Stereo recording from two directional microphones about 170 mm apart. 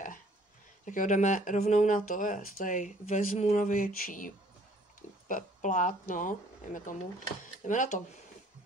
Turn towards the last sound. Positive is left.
turn(degrees=45)  # may be behind; listen again after turning